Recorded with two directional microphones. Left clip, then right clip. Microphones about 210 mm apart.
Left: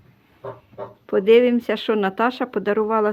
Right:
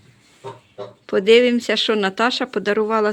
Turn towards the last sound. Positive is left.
turn(degrees=-5)  # may be behind; listen again after turning